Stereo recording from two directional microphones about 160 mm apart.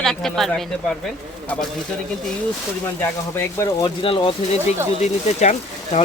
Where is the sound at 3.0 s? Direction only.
15° left (ahead or behind).